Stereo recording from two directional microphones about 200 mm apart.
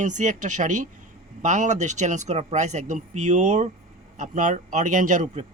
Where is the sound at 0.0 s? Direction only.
35° right (ahead or behind).